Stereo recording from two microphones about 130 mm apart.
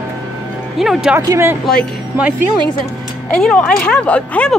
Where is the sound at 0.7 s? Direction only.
Centre (ahead or behind).